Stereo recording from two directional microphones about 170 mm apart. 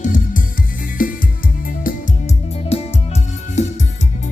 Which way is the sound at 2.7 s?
40° left (ahead or behind).